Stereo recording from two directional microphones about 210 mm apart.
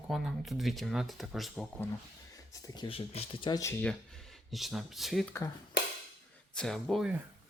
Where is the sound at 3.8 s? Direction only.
5° left (ahead or behind).